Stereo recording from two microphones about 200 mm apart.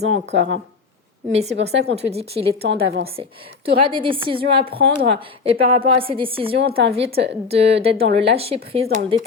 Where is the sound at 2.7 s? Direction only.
55° right (ahead or behind).